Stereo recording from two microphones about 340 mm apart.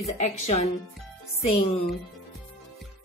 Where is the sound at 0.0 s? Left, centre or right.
Centre.